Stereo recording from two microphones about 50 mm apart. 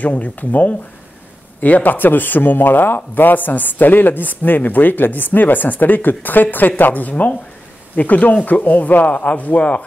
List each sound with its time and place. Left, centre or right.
0.0 s speech: left